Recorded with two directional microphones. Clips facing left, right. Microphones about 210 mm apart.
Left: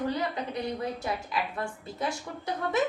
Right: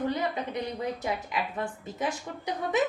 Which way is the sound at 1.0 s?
15° right (ahead or behind).